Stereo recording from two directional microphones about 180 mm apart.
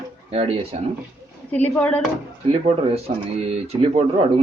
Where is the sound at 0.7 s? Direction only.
35° right (ahead or behind).